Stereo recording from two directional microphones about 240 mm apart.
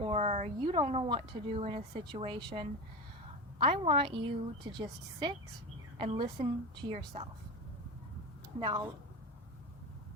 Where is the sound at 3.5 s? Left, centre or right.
Right.